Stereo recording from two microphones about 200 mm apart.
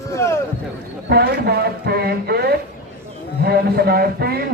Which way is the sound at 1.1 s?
50° right (ahead or behind).